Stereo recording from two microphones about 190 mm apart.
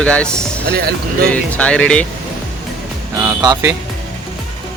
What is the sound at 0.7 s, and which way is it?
Speech, 55° right (ahead or behind).